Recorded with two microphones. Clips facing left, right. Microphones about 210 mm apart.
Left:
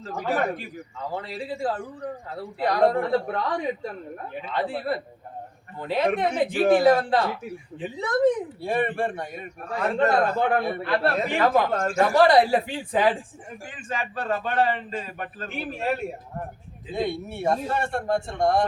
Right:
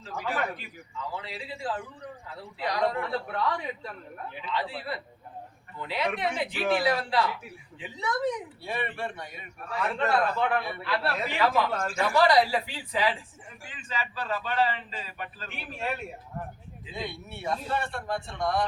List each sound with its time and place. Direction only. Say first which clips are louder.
0.0 s speech: left 6 dB; 45° left (ahead or behind)